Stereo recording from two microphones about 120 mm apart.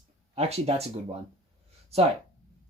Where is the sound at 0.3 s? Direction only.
60° right (ahead or behind).